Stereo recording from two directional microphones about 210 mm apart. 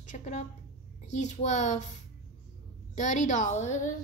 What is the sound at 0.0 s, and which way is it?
A woman's voice, 35° left (ahead or behind).